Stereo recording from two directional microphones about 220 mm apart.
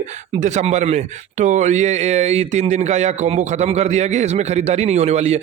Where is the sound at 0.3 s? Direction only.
35° right (ahead or behind).